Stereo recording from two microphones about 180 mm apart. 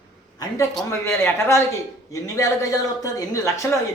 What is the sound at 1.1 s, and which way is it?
A man's voice, 15° left (ahead or behind).